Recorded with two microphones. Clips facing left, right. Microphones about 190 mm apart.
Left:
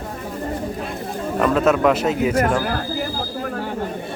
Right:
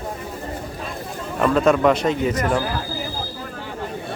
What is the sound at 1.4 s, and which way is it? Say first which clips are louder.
Speech: even; 5° left (ahead or behind).